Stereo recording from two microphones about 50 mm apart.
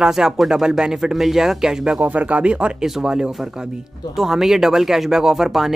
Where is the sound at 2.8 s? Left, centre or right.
Centre.